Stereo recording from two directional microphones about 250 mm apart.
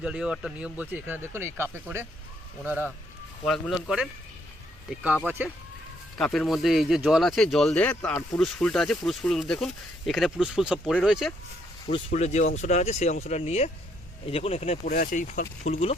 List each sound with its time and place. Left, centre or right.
0.0 s speech: centre
5.2 s speech: centre
11.9 s speech: left